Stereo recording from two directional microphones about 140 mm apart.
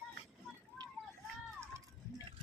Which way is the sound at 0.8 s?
30° right (ahead or behind).